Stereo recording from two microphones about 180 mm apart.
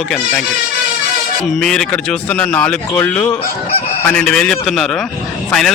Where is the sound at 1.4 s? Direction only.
5° left (ahead or behind).